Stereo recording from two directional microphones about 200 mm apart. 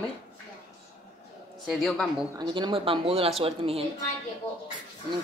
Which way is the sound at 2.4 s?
25° right (ahead or behind).